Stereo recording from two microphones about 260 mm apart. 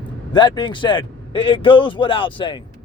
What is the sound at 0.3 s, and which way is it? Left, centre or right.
Speech, centre.